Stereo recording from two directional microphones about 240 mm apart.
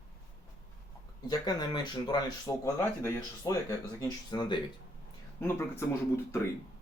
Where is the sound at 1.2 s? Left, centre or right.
Centre.